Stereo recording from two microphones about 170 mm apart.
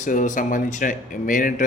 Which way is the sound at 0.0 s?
50° left (ahead or behind).